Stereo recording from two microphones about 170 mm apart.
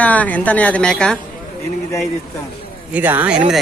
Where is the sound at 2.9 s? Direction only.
10° right (ahead or behind).